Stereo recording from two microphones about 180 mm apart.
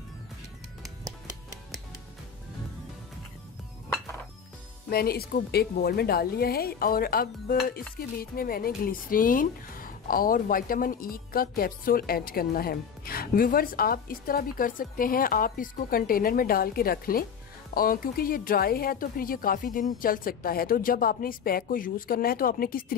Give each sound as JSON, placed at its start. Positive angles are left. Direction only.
{"t": 4.8, "sound": "a woman's voice", "side_deg": 60}